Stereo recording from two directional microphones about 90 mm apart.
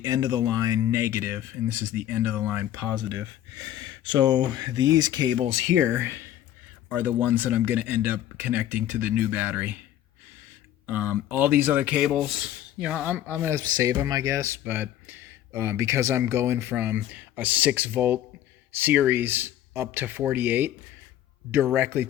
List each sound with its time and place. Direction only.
0.0 s speech: 45° right (ahead or behind)
0.9 s speech: 30° right (ahead or behind)
3.7 s speech: 55° right (ahead or behind)
5.9 s speech: 25° right (ahead or behind)
10.8 s speech: 20° right (ahead or behind)
12.0 s speech: 5° right (ahead or behind)
12.8 s speech: 15° right (ahead or behind)
13.5 s speech: 40° right (ahead or behind)
14.6 s speech: 20° right (ahead or behind)